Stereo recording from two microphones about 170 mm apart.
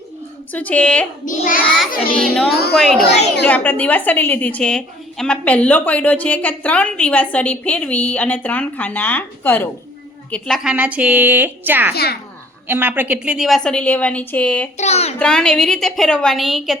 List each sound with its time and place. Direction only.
0.5 s a woman's voice: 10° left (ahead or behind)
1.2 s child singing: 50° left (ahead or behind)
2.1 s a woman's voice: 5° left (ahead or behind)
14.8 s speech: 40° left (ahead or behind)
15.2 s a woman's voice: 5° left (ahead or behind)